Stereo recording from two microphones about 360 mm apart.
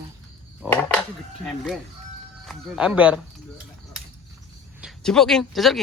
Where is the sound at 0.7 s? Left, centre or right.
Centre.